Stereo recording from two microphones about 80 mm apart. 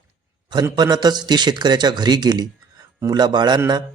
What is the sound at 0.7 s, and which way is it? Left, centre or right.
Speech, right.